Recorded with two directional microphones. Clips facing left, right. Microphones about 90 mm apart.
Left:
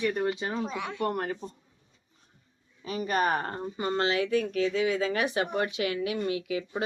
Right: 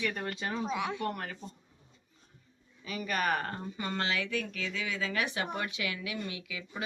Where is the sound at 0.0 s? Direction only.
10° left (ahead or behind).